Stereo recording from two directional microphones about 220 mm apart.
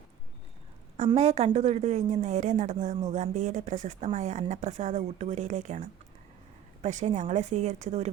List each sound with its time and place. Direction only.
0.9 s speech: 30° right (ahead or behind)